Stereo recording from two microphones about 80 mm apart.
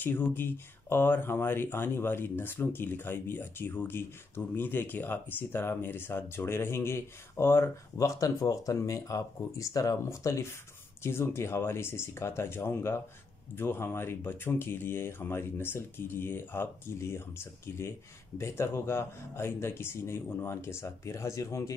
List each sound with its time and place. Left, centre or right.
0.0 s speech: left